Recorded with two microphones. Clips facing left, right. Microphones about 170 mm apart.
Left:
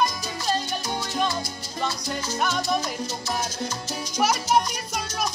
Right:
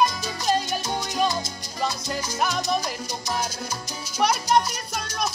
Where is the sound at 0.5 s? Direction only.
15° right (ahead or behind).